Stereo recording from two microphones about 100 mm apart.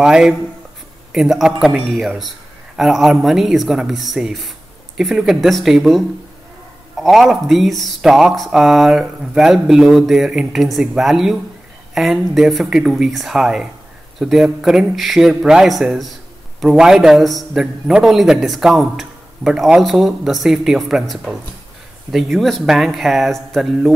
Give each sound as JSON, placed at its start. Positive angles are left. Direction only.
{"t": 0.0, "sound": "a man's voice", "side_deg": -5}